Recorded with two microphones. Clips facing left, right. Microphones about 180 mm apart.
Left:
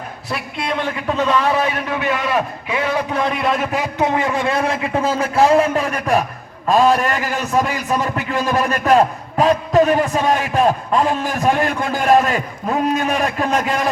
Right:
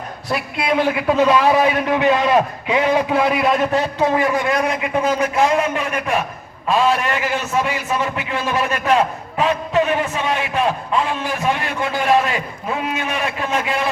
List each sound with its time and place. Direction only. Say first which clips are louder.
0.3 s a man's voice: right 3 dB; centre (ahead or behind)
4.0 s a man's voice: left 1 dB; 25° left (ahead or behind); by 13.8 s 40° left (ahead or behind)